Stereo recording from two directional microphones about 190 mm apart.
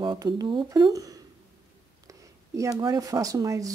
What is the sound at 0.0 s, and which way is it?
Speech, 25° right (ahead or behind).